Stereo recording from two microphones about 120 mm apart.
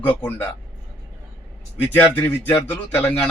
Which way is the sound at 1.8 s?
15° left (ahead or behind).